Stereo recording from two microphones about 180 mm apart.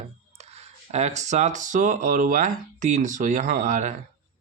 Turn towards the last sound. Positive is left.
turn(degrees=-45)  # may be behind; listen again after turning